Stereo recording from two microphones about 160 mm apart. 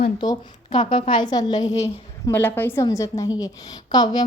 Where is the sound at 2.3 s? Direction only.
10° left (ahead or behind).